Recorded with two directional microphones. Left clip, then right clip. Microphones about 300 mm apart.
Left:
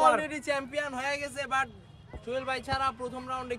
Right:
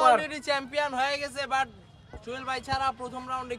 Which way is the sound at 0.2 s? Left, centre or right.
Centre.